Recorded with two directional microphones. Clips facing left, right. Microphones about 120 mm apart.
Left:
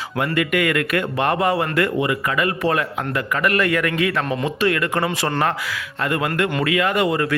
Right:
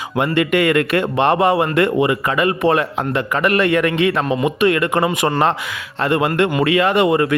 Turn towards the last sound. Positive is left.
turn(degrees=-25)  # may be behind; listen again after turning